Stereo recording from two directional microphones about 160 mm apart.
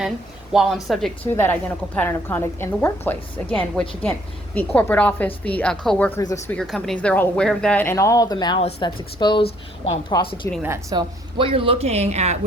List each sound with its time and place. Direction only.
0.5 s a woman's voice: 5° right (ahead or behind)
1.4 s a woman's voice: 10° left (ahead or behind)
6.1 s speech: 20° left (ahead or behind)
6.5 s a woman's voice: 5° left (ahead or behind); by 10.3 s 25° left (ahead or behind)
10.6 s a woman's voice: 20° right (ahead or behind)
11.3 s speech: 35° right (ahead or behind)